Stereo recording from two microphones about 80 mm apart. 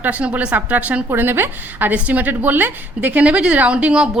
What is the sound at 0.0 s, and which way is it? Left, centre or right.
A woman's voice, centre.